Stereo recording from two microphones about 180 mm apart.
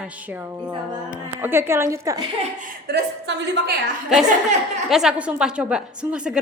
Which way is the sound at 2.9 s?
75° right (ahead or behind).